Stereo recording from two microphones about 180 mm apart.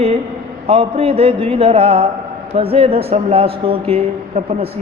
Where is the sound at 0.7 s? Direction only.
35° right (ahead or behind).